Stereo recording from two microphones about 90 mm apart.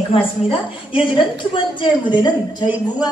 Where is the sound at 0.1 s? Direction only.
85° left; by 2.1 s 65° left (ahead or behind).